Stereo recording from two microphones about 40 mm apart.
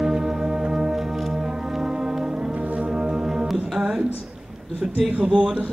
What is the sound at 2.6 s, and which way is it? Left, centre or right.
Organ, right.